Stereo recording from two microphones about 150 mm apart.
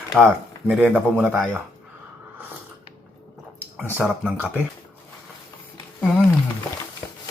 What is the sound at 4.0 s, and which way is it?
Speech, 5° right (ahead or behind).